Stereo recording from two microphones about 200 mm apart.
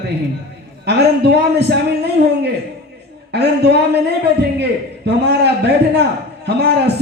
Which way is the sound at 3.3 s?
55° right (ahead or behind).